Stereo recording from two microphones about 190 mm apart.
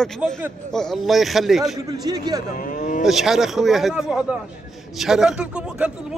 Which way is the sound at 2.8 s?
40° left (ahead or behind).